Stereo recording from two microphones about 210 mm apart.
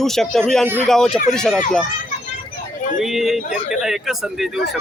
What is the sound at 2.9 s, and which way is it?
Speech, centre (ahead or behind).